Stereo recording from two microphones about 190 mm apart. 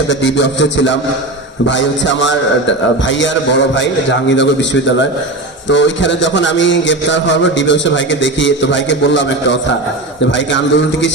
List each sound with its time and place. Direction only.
0.1 s a man's voice: 70° left (ahead or behind)